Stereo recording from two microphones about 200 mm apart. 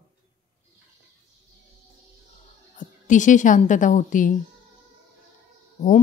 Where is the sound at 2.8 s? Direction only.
40° left (ahead or behind).